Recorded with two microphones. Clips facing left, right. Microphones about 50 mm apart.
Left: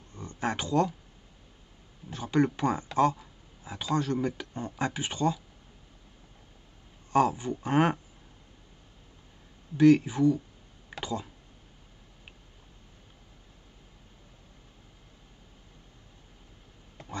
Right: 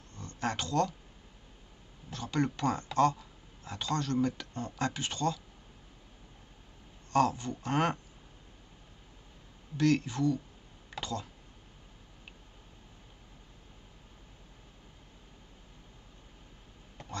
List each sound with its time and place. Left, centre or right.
0.1 s speech: centre
2.0 s speech: centre
7.1 s speech: centre
9.8 s speech: centre